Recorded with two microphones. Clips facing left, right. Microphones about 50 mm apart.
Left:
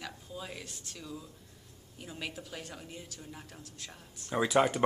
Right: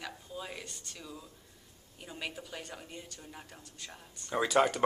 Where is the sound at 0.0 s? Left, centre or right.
Centre.